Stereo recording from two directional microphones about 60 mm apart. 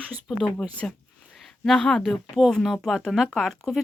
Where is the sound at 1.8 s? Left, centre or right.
Centre.